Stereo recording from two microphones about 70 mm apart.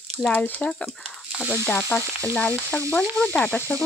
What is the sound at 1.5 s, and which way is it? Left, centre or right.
Frying, left.